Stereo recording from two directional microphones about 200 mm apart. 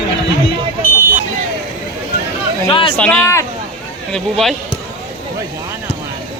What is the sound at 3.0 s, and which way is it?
Speech, 10° left (ahead or behind).